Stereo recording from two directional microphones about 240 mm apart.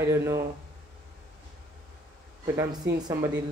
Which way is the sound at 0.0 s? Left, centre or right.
Centre.